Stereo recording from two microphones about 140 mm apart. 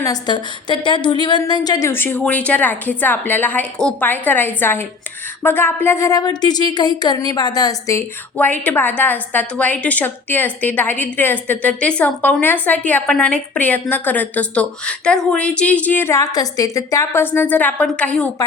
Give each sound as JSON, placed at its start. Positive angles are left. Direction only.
{"t": 0.0, "sound": "a woman's voice", "side_deg": 30}
{"t": 8.4, "sound": "a woman's voice", "side_deg": 10}